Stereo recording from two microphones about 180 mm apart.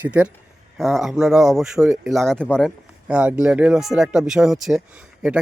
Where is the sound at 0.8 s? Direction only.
Centre (ahead or behind).